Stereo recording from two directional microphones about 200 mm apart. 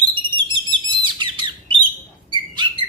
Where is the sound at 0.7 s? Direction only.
25° right (ahead or behind).